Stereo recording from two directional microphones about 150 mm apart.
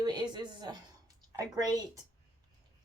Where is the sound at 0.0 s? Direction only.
30° right (ahead or behind).